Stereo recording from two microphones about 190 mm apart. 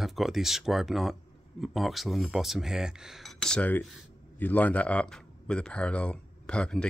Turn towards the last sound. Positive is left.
turn(degrees=5)  # may be behind; listen again after turning